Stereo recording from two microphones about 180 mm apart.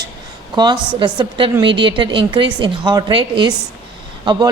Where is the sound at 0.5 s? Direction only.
25° right (ahead or behind).